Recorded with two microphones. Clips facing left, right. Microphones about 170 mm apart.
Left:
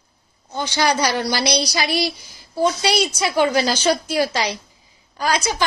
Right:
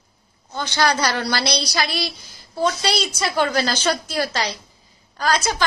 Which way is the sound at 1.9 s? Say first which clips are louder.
Left 5 dB; 50° left (ahead or behind).